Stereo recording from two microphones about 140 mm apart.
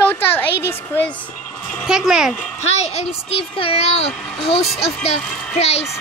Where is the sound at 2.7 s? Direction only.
50° left (ahead or behind).